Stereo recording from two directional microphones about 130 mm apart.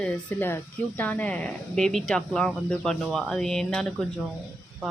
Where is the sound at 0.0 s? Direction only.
10° left (ahead or behind).